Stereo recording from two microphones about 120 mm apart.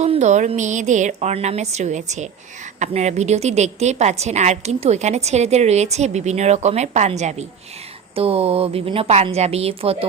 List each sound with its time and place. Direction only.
0.0 s a woman's voice: 70° right (ahead or behind)
8.1 s speech: 55° right (ahead or behind)